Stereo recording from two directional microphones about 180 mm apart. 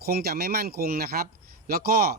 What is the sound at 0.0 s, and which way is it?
Speech, 60° right (ahead or behind).